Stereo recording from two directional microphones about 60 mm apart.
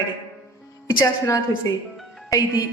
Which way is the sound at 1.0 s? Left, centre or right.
Left.